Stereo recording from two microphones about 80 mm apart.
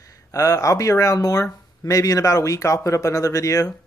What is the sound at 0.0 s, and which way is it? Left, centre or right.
Speech, left.